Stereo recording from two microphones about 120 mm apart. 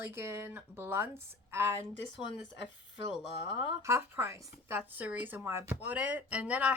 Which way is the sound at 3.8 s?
25° right (ahead or behind).